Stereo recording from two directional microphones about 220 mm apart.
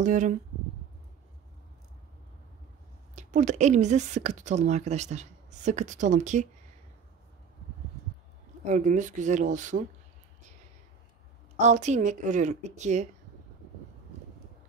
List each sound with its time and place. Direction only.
0.0 s a woman's voice: 35° right (ahead or behind)
3.2 s a woman's voice: 35° right (ahead or behind)
8.6 s a woman's voice: 35° right (ahead or behind)
11.5 s a woman's voice: 30° right (ahead or behind)